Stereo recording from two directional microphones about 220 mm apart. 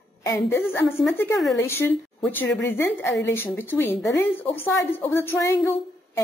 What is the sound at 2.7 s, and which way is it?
A woman's voice, 10° left (ahead or behind).